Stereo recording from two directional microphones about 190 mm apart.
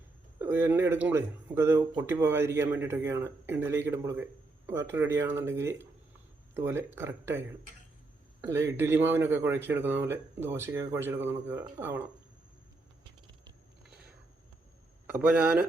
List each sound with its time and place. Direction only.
0.3 s speech: 10° right (ahead or behind)
15.0 s speech: 10° right (ahead or behind)